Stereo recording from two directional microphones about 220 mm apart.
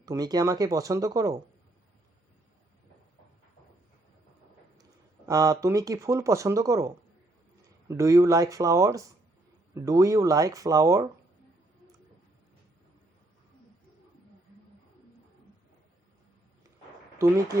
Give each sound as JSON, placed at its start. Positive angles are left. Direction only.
{"t": 0.0, "sound": "speech", "side_deg": -15}
{"t": 4.8, "sound": "speech", "side_deg": -15}
{"t": 17.2, "sound": "speech", "side_deg": -10}